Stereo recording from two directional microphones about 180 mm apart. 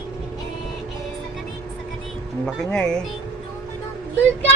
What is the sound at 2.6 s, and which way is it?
Speech, 5° left (ahead or behind).